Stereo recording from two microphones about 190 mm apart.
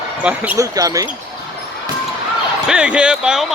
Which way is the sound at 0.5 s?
20° right (ahead or behind).